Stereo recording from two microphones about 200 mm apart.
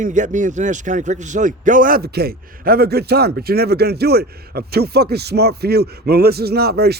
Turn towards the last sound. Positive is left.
turn(degrees=-50)  # may be behind; listen again after turning